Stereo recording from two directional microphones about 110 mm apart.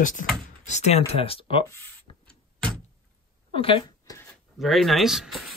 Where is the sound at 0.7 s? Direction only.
70° left (ahead or behind); by 1.6 s 55° left (ahead or behind).